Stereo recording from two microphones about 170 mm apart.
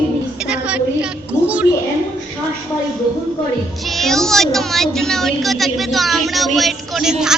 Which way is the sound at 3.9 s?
Centre (ahead or behind).